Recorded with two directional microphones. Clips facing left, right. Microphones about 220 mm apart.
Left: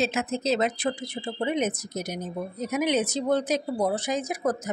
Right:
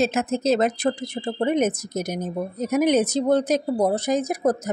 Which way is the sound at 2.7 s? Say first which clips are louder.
Right 6 dB; 45° right (ahead or behind).